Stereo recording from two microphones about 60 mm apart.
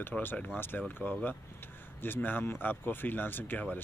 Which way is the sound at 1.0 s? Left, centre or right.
Left.